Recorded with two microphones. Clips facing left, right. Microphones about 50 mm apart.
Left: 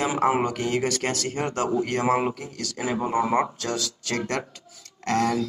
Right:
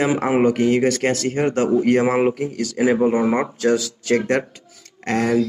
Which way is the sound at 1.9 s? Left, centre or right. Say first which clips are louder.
Right 6 dB; centre.